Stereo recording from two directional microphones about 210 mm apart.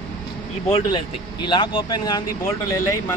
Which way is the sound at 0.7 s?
20° left (ahead or behind).